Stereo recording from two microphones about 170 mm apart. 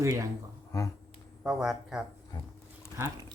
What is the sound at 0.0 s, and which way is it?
Speech, 20° right (ahead or behind).